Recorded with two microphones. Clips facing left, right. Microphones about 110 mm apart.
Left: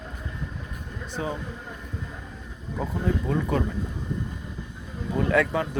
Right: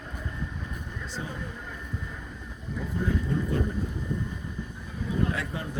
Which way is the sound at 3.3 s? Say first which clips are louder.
Left 3 dB; 90° left.